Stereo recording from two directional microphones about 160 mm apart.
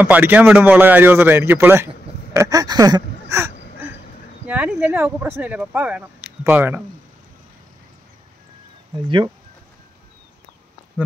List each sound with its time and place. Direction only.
0.0 s speech: 10° right (ahead or behind)